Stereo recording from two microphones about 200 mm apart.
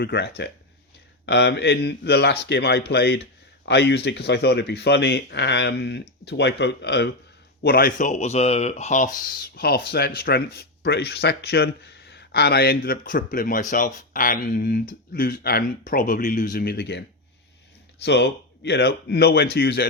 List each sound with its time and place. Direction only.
0.0 s speech: 55° left (ahead or behind)
18.0 s speech: 55° left (ahead or behind)